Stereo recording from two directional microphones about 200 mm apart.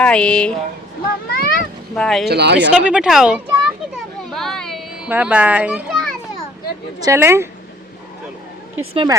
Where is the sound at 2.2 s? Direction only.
55° right (ahead or behind).